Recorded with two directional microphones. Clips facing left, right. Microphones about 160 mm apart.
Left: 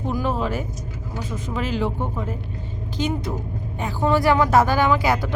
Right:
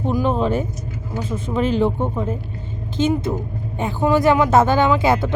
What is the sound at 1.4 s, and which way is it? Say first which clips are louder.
Speech: right 8 dB; 30° right (ahead or behind).